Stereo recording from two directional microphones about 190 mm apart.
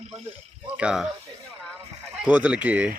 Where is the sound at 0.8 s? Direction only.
5° right (ahead or behind).